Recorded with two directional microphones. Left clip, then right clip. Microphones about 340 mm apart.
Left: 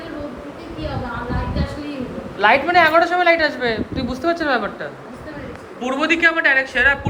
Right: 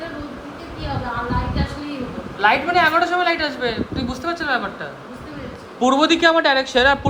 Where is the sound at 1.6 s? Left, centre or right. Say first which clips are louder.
Even; centre.